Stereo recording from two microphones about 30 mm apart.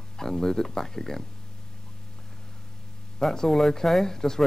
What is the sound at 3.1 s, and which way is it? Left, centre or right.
Speech, centre.